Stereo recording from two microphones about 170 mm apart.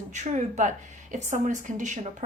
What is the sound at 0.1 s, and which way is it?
A woman's voice, 45° right (ahead or behind).